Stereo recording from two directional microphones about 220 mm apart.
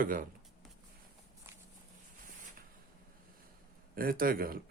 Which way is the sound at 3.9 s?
40° right (ahead or behind).